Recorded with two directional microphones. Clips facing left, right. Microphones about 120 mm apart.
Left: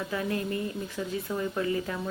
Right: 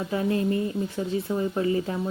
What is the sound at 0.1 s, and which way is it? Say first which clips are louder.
Speech: right 8 dB; 30° right (ahead or behind).